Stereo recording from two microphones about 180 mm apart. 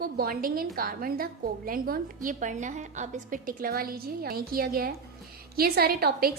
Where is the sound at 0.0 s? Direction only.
55° right (ahead or behind).